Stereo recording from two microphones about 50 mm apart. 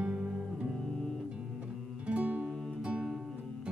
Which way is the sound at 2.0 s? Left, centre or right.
Right.